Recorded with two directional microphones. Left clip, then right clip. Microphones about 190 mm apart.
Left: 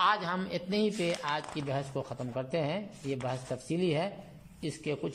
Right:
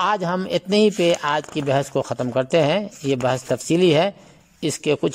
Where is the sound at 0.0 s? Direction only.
40° right (ahead or behind).